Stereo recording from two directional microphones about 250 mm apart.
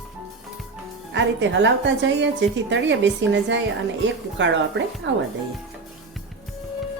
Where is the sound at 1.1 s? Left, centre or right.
Right.